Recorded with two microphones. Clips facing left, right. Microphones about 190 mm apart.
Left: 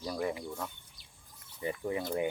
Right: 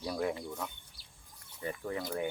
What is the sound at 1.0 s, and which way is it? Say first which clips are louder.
Bird: even; 35° right (ahead or behind).